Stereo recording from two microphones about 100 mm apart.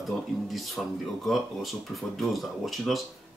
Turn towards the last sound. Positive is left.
turn(degrees=0)  # may be behind; listen again after turning